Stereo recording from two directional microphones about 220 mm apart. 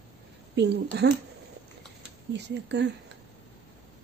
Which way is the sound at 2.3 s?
50° right (ahead or behind).